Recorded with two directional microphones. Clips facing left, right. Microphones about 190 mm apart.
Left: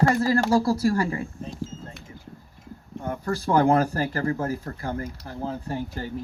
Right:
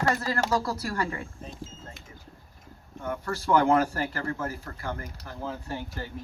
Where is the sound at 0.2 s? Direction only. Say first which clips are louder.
Left 7 dB; 30° left (ahead or behind).